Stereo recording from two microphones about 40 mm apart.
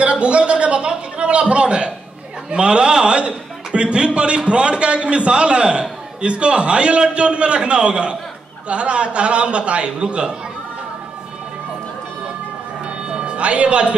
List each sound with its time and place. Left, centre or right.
0.0 s a sound: right
2.5 s a man's voice: right
13.1 s speech: right